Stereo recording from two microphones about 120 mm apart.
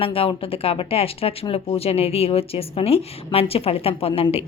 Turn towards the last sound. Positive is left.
turn(degrees=55)  # may be behind; listen again after turning